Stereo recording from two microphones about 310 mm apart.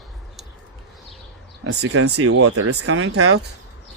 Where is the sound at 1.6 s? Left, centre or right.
Right.